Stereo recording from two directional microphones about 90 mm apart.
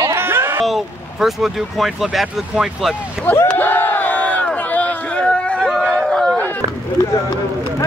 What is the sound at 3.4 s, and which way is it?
Crowd, 20° left (ahead or behind).